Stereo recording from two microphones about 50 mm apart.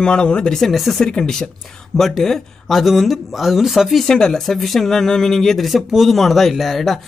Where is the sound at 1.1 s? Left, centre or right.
Centre.